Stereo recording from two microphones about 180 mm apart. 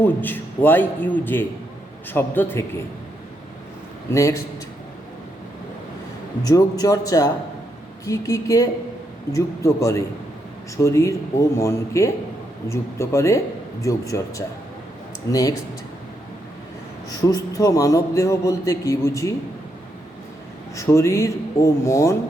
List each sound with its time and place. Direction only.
0.0 s a man's voice: 10° left (ahead or behind)
4.1 s a man's voice: 15° left (ahead or behind)
6.4 s a man's voice: 20° left (ahead or behind)
17.2 s a man's voice: 20° left (ahead or behind)
20.7 s a man's voice: 15° left (ahead or behind)